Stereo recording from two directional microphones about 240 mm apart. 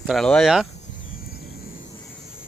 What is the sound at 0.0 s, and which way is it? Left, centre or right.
Speech, centre.